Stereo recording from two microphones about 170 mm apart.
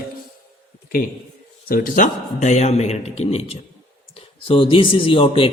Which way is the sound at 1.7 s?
50° left (ahead or behind).